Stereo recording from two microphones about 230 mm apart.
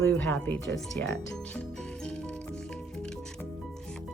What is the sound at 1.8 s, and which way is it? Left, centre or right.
Music, centre.